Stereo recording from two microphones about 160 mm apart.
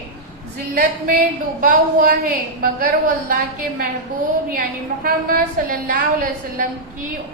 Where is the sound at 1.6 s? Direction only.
60° right (ahead or behind).